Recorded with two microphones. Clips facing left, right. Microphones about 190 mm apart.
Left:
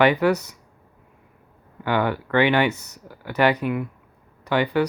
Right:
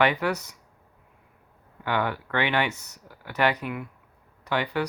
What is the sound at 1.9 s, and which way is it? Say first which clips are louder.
Speech: left 5 dB; 5° left (ahead or behind).